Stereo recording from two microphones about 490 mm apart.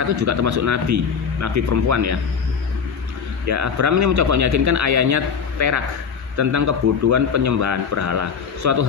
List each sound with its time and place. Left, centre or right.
0.1 s a man's voice: right
3.4 s a man's voice: right